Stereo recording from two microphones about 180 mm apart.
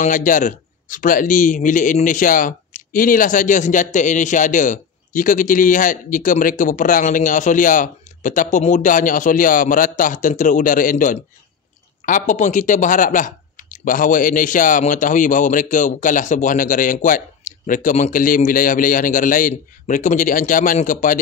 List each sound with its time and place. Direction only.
0.0 s a man's voice: 45° left (ahead or behind)